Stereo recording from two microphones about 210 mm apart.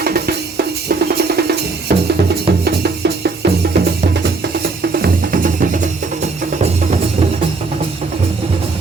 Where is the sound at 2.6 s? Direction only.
50° right (ahead or behind).